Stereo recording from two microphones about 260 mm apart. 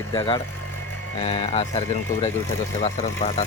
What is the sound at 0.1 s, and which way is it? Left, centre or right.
Speech, centre.